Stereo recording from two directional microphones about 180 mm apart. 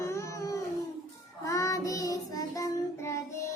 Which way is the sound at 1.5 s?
15° left (ahead or behind).